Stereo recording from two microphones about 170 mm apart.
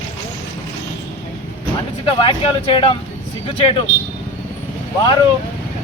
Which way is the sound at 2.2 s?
30° left (ahead or behind).